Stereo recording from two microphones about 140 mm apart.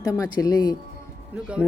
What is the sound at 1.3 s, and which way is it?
Speech, 10° right (ahead or behind).